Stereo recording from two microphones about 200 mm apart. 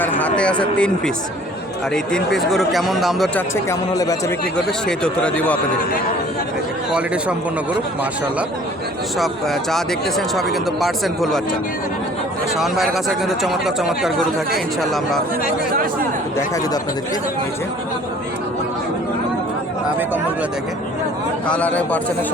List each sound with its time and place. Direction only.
0.0 s a man's voice: 10° left (ahead or behind)
2.1 s speech: centre (ahead or behind)
3.7 s a man's voice: 15° left (ahead or behind)
4.5 s speech: 5° left (ahead or behind)
9.1 s speech: centre (ahead or behind)
12.5 s speech: centre (ahead or behind)
15.7 s speech: 45° right (ahead or behind)
21.4 s a man's voice: 5° left (ahead or behind)